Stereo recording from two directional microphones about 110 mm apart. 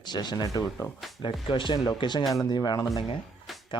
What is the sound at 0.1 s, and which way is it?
Speech, 40° left (ahead or behind).